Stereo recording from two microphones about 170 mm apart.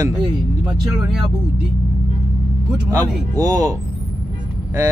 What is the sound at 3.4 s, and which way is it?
Speech, 20° right (ahead or behind).